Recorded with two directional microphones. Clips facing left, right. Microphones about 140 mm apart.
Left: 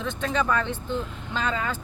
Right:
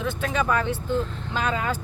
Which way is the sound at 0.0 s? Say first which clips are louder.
Right 1 dB; 5° right (ahead or behind).